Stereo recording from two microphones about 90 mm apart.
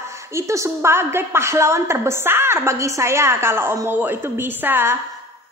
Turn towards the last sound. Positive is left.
turn(degrees=-25)  # may be behind; listen again after turning